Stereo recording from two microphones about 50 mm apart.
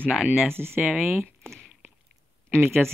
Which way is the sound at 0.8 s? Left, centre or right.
Centre.